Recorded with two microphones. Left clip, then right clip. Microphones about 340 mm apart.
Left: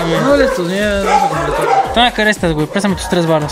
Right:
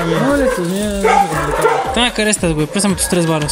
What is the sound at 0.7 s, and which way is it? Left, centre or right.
Speech, left.